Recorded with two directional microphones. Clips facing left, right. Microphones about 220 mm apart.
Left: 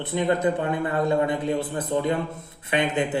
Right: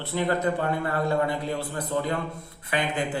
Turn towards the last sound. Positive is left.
turn(degrees=20)  # may be behind; listen again after turning